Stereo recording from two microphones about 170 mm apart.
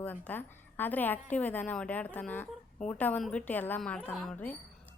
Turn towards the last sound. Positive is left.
turn(degrees=10)  # may be behind; listen again after turning